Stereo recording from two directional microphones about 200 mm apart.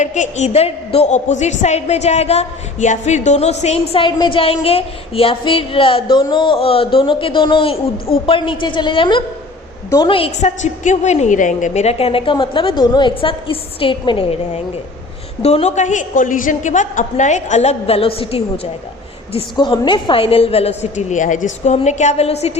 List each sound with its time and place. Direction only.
0.0 s a woman's voice: 35° left (ahead or behind)